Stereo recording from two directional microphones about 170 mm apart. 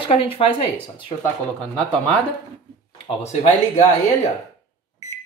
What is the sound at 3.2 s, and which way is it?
Speech, 40° left (ahead or behind).